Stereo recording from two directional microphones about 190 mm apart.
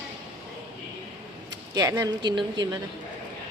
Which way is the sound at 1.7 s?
15° right (ahead or behind).